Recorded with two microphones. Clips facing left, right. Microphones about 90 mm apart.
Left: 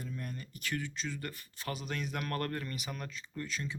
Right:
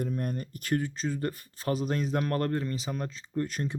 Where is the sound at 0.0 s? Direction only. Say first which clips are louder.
Right 10 dB; 55° right (ahead or behind); by 3.4 s 30° right (ahead or behind).